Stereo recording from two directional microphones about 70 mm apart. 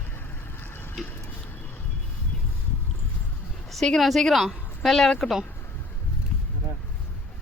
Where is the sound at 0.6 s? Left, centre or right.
Left.